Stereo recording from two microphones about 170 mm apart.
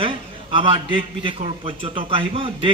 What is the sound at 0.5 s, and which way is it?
A man's voice, 30° right (ahead or behind).